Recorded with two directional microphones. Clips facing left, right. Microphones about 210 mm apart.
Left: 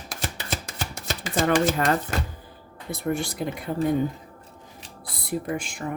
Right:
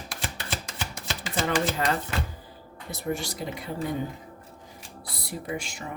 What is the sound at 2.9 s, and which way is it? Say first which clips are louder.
Speech: left 4 dB; 55° left (ahead or behind).